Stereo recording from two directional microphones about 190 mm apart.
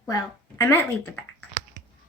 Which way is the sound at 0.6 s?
10° left (ahead or behind).